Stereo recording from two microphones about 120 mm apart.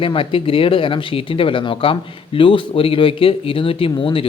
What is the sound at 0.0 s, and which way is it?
Speech, 50° left (ahead or behind).